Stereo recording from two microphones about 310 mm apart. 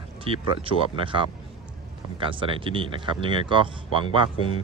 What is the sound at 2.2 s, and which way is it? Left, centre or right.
Speech, centre.